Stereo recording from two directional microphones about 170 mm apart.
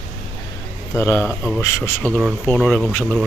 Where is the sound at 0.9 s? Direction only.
15° left (ahead or behind).